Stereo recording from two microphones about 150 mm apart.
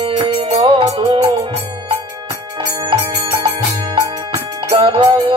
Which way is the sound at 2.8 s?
35° right (ahead or behind).